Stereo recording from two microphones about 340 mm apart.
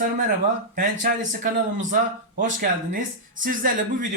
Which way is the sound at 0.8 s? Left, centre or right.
Right.